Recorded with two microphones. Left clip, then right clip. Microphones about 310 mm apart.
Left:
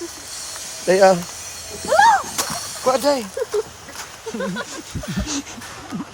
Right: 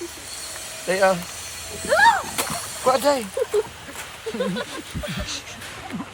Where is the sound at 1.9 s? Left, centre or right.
Centre.